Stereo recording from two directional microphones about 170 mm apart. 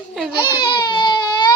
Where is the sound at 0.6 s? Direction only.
30° left (ahead or behind).